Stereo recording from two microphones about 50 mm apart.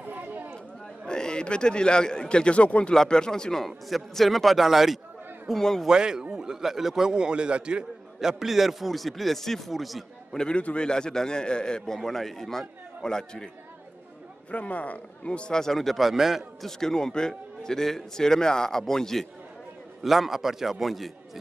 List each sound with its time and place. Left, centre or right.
0.0 s a sound: right
1.0 s a man's voice: centre
2.9 s a man's voice: centre
3.6 s a man's voice: centre
5.9 s a man's voice: centre
10.3 s a man's voice: centre
14.5 s speech: left
15.6 s speech: centre
16.6 s a man's voice: centre
20.0 s speech: centre